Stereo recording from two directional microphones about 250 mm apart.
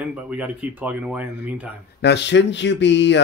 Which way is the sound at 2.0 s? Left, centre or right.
Left.